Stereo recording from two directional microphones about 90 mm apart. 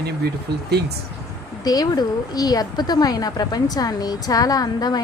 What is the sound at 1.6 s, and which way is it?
A woman's voice, 45° left (ahead or behind).